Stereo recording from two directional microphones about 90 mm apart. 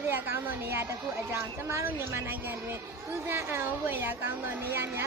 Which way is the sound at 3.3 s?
25° right (ahead or behind).